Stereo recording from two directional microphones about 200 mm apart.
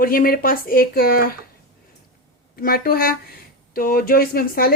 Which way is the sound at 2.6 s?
50° left (ahead or behind).